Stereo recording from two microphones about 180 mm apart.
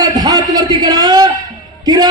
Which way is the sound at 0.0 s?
20° right (ahead or behind).